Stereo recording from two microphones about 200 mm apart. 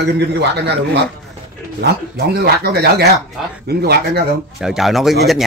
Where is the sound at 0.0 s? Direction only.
55° right (ahead or behind).